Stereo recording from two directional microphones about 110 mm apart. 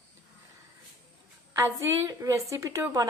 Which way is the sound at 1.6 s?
25° right (ahead or behind).